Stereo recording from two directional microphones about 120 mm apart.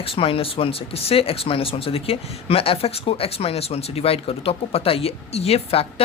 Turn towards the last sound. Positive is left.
turn(degrees=55)  # may be behind; listen again after turning